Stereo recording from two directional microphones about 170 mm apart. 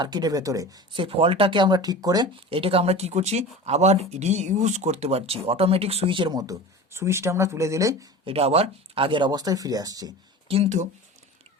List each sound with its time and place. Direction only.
0.0 s speech: 25° right (ahead or behind)
8.2 s speech: 35° right (ahead or behind)
10.5 s speech: 40° right (ahead or behind)